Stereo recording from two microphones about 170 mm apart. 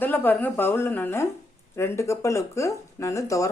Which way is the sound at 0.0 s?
10° left (ahead or behind).